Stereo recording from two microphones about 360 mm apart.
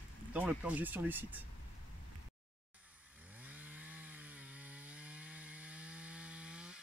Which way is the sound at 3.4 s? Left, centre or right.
Centre.